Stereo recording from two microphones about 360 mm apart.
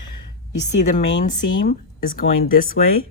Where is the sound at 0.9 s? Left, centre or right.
Left.